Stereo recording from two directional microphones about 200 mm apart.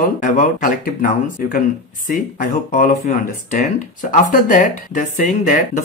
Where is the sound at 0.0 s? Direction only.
40° left (ahead or behind).